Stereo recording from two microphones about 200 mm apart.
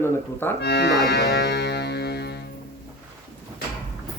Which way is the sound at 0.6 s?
55° left (ahead or behind).